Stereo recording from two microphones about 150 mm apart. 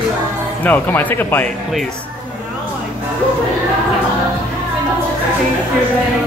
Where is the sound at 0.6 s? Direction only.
10° left (ahead or behind).